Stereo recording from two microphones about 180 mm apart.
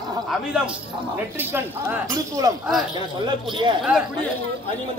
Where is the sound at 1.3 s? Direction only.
10° right (ahead or behind).